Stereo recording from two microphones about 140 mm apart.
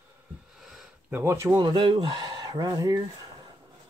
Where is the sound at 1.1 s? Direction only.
15° right (ahead or behind).